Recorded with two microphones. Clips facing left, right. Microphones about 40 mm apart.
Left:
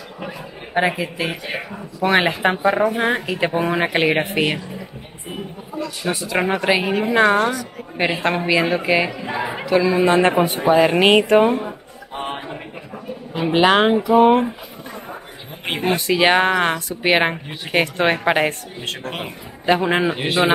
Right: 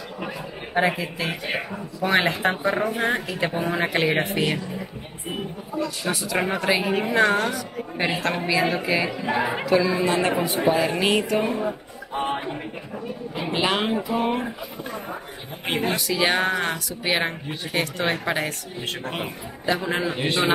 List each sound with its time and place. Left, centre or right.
0.7 s a woman's voice: centre
3.0 s speech: left
6.0 s a woman's voice: centre
6.7 s a woman's voice: centre
9.4 s speech: centre
9.9 s speech: left
12.1 s a sound: left
13.3 s speech: left
15.7 s speech: left
18.8 s speech: centre
19.2 s a man's voice: left
20.2 s a woman's voice: centre